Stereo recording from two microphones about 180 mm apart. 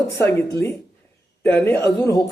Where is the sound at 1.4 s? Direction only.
10° left (ahead or behind).